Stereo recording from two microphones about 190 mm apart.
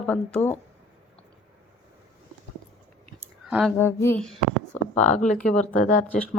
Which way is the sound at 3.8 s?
10° left (ahead or behind).